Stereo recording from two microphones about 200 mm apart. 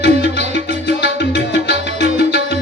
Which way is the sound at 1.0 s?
55° left (ahead or behind).